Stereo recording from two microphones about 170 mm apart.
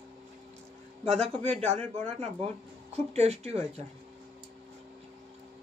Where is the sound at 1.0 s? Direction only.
40° right (ahead or behind).